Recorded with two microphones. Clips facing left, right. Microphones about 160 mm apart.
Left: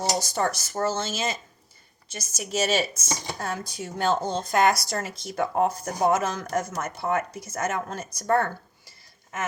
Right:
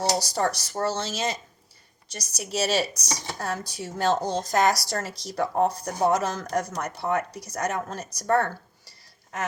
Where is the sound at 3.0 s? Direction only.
20° left (ahead or behind).